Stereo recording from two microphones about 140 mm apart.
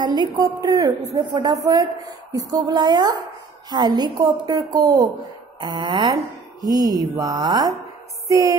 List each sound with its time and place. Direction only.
0.0 s a woman's voice: 30° right (ahead or behind)